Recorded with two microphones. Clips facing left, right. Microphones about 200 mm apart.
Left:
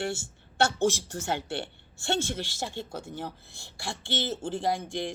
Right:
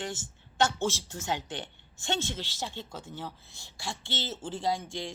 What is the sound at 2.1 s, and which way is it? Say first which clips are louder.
Speech: left 4 dB; 15° left (ahead or behind).